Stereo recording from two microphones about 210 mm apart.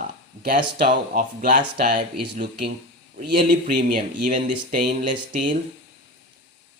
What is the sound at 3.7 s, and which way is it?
Speech, 40° right (ahead or behind).